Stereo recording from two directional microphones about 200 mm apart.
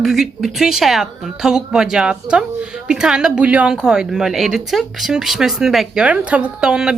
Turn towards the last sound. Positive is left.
turn(degrees=-5)  # may be behind; listen again after turning